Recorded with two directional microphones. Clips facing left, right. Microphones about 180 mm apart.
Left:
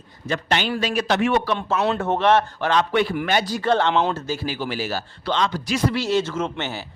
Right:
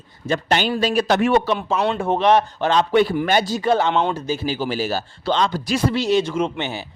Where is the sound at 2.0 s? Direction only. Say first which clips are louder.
Right 3 dB; 15° right (ahead or behind).